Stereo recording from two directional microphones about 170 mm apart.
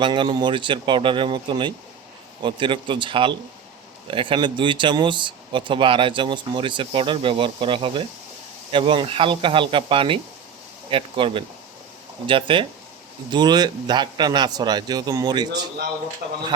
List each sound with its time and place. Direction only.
0.0 s speech: 30° right (ahead or behind)
16.2 s speech: 65° right (ahead or behind)